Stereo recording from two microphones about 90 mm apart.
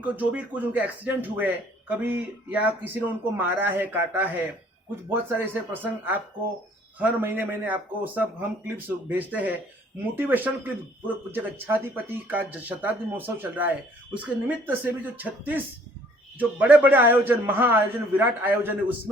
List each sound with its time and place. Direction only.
0.0 s speech: 15° right (ahead or behind)